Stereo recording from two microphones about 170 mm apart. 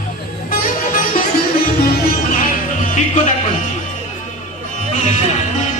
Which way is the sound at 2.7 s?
45° left (ahead or behind).